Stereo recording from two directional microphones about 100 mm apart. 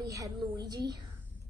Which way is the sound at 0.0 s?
35° right (ahead or behind).